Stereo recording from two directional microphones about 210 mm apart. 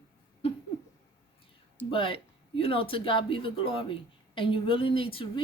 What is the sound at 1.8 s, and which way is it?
Speech, 25° left (ahead or behind).